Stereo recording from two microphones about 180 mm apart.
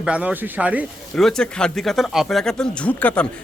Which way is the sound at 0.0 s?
5° right (ahead or behind).